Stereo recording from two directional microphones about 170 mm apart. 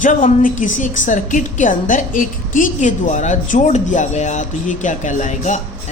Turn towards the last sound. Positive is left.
turn(degrees=45)  # may be behind; listen again after turning